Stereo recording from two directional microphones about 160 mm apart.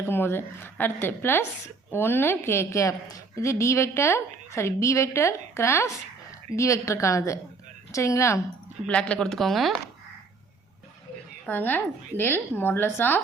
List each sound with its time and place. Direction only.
0.0 s a woman's voice: 15° left (ahead or behind)
8.9 s speech: 5° left (ahead or behind)
11.4 s a woman's voice: 10° left (ahead or behind)